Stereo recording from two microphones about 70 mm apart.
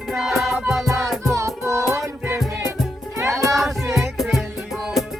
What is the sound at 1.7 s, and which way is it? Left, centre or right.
Music, right.